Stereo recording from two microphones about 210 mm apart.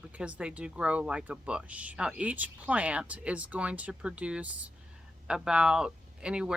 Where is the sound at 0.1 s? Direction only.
5° right (ahead or behind).